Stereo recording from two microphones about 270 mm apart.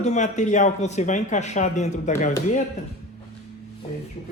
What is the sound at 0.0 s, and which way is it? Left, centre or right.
A man's voice, left.